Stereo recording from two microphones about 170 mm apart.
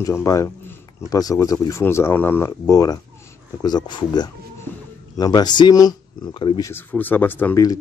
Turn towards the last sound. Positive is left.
turn(degrees=10)  # may be behind; listen again after turning